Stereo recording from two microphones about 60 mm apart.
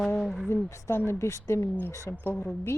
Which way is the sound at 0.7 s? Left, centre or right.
Left.